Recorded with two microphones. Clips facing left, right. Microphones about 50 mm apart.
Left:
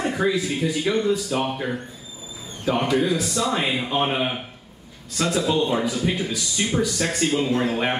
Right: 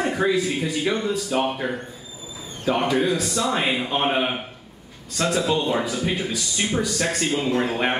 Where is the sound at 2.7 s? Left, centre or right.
Centre.